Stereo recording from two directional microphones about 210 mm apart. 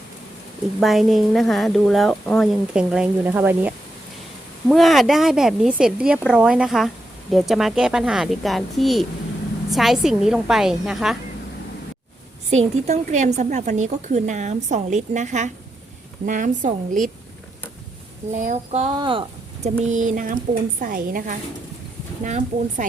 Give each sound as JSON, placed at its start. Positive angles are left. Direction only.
{"t": 0.8, "sound": "a woman's voice", "side_deg": 0}
{"t": 4.7, "sound": "a woman's voice", "side_deg": 0}
{"t": 12.5, "sound": "a woman's voice", "side_deg": -30}
{"t": 18.3, "sound": "a woman's voice", "side_deg": -35}
{"t": 18.9, "sound": "speech", "side_deg": -25}
{"t": 19.6, "sound": "a woman's voice", "side_deg": -35}